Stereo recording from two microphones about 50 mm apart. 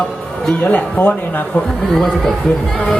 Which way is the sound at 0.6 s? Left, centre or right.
Left.